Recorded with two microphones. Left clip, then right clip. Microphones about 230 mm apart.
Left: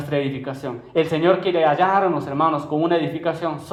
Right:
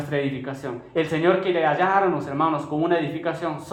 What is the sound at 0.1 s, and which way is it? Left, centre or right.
Speech, left.